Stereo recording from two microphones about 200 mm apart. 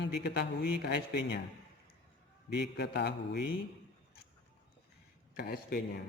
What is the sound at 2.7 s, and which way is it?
Speech, 55° left (ahead or behind).